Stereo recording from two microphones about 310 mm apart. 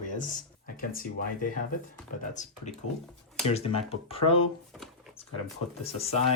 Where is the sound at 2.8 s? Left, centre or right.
Left.